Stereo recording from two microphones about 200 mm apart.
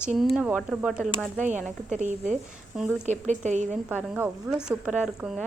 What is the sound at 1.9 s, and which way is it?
A woman's voice, 35° right (ahead or behind).